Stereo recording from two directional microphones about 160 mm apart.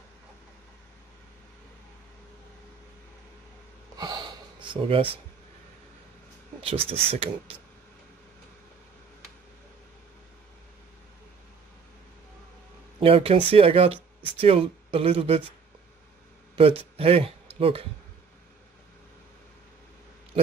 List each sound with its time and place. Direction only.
3.9 s gasp: 25° right (ahead or behind)
6.6 s speech: 35° right (ahead or behind)
13.0 s speech: 35° right (ahead or behind)
16.5 s a man's voice: 35° right (ahead or behind)